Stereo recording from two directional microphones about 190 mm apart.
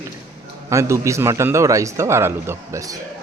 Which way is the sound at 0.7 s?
15° right (ahead or behind).